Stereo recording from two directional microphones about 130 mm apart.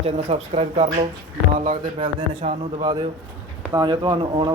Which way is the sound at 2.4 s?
60° right (ahead or behind).